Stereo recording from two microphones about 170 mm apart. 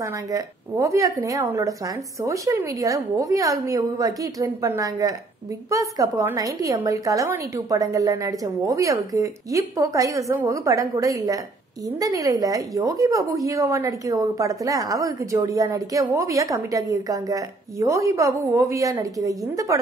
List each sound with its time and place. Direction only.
0.0 s a woman's voice: 20° right (ahead or behind)